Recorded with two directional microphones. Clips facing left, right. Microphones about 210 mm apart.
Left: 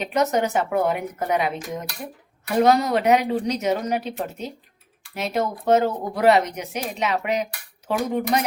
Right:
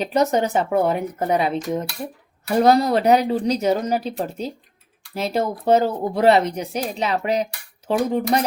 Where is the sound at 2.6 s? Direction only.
35° right (ahead or behind).